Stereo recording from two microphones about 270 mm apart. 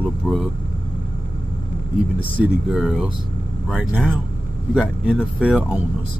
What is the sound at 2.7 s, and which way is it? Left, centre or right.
Speech, centre.